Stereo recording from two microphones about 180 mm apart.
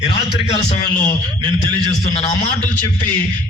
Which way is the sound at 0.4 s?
35° left (ahead or behind).